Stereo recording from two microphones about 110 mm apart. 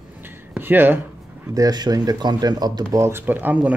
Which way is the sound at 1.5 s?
35° right (ahead or behind).